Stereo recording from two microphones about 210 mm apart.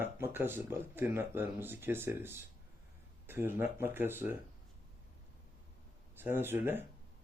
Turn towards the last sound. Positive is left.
turn(degrees=-10)  # may be behind; listen again after turning